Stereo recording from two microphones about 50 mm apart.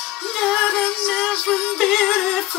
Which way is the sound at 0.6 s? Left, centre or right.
Centre.